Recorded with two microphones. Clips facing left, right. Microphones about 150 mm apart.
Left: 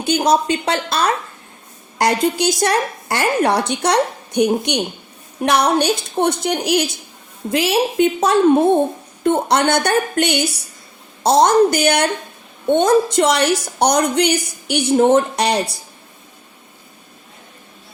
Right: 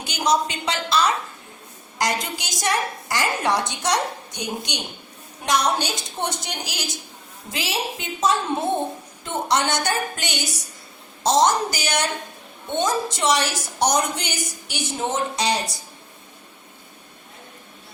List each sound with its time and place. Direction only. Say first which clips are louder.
0.0 s a woman's voice: left 6 dB; 55° left (ahead or behind)